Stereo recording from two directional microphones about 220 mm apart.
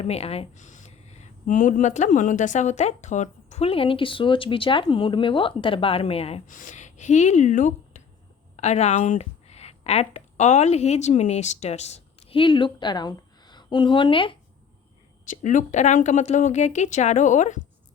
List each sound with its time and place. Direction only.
0.0 s speech: 30° left (ahead or behind)
15.3 s speech: 35° left (ahead or behind)